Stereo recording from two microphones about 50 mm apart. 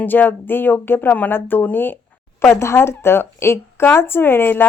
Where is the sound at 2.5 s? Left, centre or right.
Left.